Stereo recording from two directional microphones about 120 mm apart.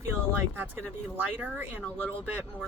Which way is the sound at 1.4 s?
15° right (ahead or behind).